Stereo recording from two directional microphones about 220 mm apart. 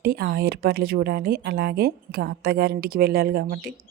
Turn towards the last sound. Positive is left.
turn(degrees=-45)  # may be behind; listen again after turning